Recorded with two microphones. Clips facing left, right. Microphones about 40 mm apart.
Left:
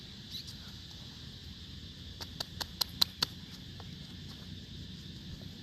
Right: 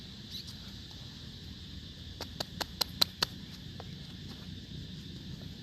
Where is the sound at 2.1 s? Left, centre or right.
Right.